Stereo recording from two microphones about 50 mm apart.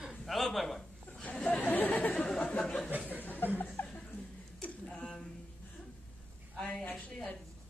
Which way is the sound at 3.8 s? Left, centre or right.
Left.